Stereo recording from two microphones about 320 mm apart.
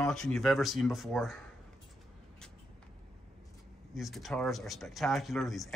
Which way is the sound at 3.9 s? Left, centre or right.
Centre.